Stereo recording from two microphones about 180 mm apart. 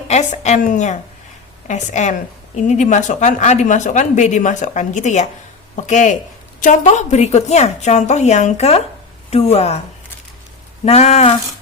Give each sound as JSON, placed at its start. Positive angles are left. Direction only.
{"t": 0.1, "sound": "speech", "side_deg": 40}
{"t": 10.8, "sound": "speech", "side_deg": 35}